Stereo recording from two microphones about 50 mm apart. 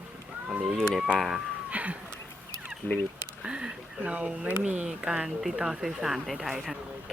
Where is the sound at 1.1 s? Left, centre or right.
Centre.